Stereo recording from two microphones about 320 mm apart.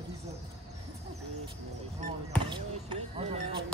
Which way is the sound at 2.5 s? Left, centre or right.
Centre.